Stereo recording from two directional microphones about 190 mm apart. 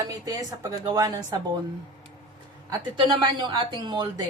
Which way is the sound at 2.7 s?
25° right (ahead or behind).